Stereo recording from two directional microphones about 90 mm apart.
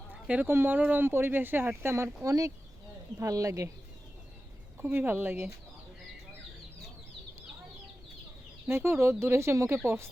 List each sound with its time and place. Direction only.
0.1 s a sound: 20° right (ahead or behind)
0.5 s speech: 20° right (ahead or behind)
2.2 s speech: 40° right (ahead or behind)
4.8 s speech: 25° right (ahead or behind)
8.6 s speech: 30° right (ahead or behind)